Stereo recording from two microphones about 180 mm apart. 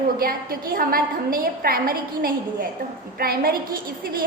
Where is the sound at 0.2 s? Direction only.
55° right (ahead or behind).